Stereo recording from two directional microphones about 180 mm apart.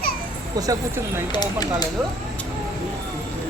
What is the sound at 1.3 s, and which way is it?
Speech, 20° left (ahead or behind).